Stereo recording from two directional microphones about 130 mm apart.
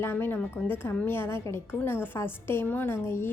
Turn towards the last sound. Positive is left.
turn(degrees=20)  # may be behind; listen again after turning